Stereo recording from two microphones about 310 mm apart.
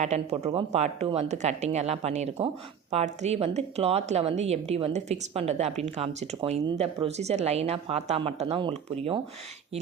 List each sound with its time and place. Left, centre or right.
0.0 s speech: right